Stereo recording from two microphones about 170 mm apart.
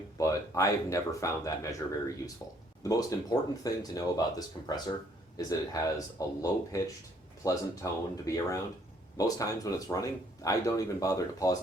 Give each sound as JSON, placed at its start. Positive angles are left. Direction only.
{"t": 0.2, "sound": "speech", "side_deg": 20}